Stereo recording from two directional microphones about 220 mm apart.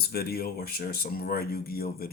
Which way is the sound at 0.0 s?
45° left (ahead or behind).